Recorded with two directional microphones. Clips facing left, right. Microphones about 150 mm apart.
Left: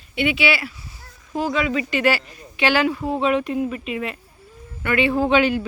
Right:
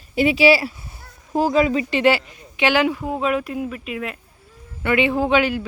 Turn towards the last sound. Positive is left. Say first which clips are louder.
# left 1 dB
turn(degrees=-5)  # may be behind; listen again after turning